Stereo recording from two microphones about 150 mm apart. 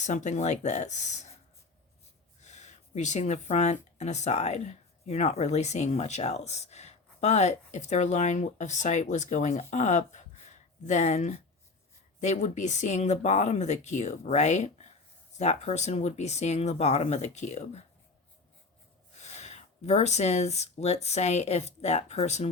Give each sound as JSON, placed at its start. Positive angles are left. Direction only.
{"t": 0.0, "sound": "speech", "side_deg": 55}
{"t": 2.4, "sound": "speech", "side_deg": 50}
{"t": 19.2, "sound": "speech", "side_deg": 50}